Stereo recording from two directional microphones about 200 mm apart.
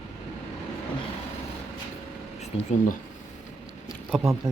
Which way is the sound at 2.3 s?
35° left (ahead or behind).